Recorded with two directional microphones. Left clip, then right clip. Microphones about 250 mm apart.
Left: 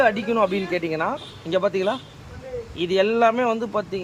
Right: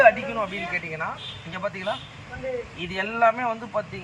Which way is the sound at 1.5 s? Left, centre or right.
Left.